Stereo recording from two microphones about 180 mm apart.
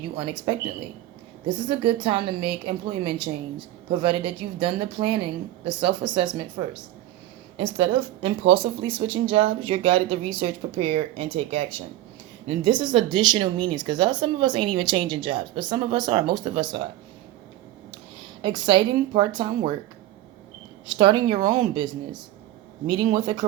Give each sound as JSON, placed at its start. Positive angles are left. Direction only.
{"t": 1.5, "sound": "speech", "side_deg": -25}
{"t": 18.4, "sound": "speech", "side_deg": -25}
{"t": 21.0, "sound": "speech", "side_deg": -25}